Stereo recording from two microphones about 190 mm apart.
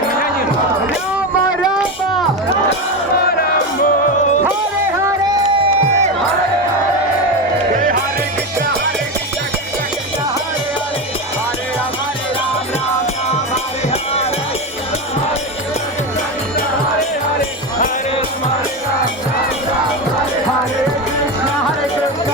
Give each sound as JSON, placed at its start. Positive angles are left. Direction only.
{"t": 5.0, "sound": "music", "side_deg": -25}
{"t": 13.9, "sound": "music", "side_deg": 30}